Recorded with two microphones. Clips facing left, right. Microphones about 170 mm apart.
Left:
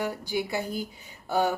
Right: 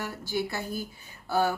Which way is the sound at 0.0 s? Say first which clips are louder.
Left 2 dB; 15° left (ahead or behind).